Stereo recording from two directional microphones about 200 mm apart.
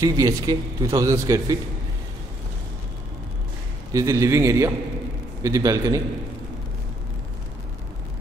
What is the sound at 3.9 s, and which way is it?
A man's voice, 15° right (ahead or behind).